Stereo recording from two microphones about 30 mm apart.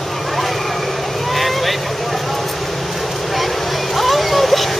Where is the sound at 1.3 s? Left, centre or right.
Centre.